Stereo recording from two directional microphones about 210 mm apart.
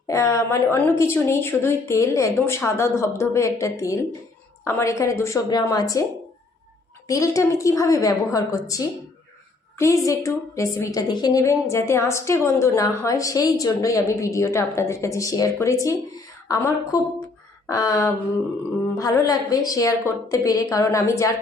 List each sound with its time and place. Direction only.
0.1 s a woman's voice: 15° left (ahead or behind)
7.1 s a woman's voice: 15° left (ahead or behind)